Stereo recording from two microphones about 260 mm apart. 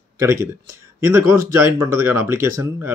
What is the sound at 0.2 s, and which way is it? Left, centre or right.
Speech, centre.